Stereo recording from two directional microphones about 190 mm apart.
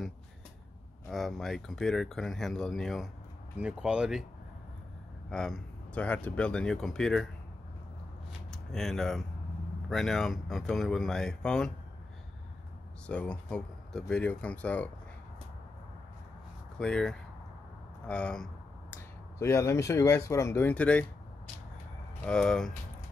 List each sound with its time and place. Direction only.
1.0 s speech: centre (ahead or behind)
5.3 s speech: 5° left (ahead or behind)
8.3 s a sound: centre (ahead or behind)
9.8 s speech: centre (ahead or behind)
13.0 s speech: 5° left (ahead or behind)
16.7 s speech: 5° left (ahead or behind)
22.2 s speech: 5° left (ahead or behind)